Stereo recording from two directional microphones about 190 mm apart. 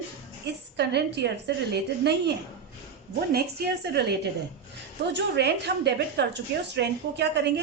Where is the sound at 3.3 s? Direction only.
55° right (ahead or behind).